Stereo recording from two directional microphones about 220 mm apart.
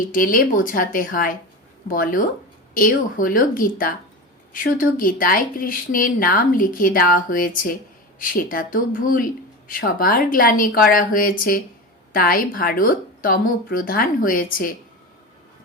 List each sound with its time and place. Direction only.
0.1 s speech: 40° left (ahead or behind)